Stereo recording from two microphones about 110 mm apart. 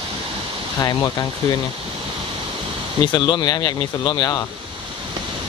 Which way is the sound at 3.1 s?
40° left (ahead or behind).